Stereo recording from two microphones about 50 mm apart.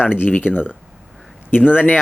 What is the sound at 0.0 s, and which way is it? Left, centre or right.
Speech, left.